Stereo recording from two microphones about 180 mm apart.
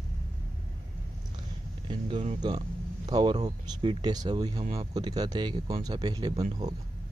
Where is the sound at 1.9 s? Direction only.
25° right (ahead or behind).